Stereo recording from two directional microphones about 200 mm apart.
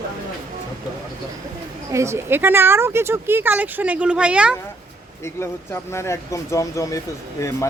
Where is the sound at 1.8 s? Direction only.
15° right (ahead or behind).